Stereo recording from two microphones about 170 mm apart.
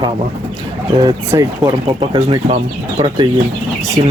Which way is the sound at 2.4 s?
35° right (ahead or behind).